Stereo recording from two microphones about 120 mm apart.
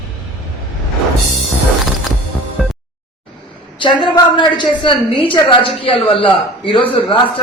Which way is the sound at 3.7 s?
40° left (ahead or behind).